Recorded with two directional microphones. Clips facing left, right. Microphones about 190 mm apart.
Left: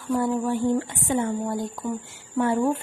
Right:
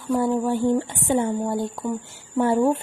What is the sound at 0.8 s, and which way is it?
A woman's voice, 35° right (ahead or behind).